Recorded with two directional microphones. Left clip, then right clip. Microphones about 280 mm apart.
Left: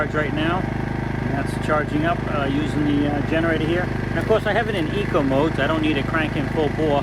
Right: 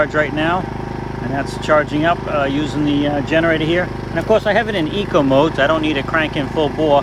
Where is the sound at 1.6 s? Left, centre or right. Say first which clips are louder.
Right 7 dB; right.